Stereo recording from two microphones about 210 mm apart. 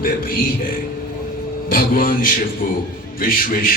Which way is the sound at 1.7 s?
40° left (ahead or behind).